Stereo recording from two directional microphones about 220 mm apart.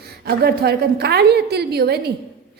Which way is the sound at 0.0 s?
45° right (ahead or behind).